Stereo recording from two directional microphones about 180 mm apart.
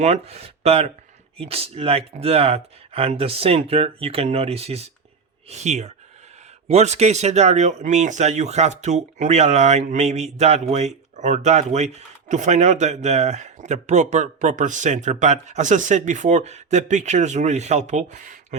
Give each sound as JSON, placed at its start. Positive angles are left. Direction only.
{"t": 0.0, "sound": "speech", "side_deg": -35}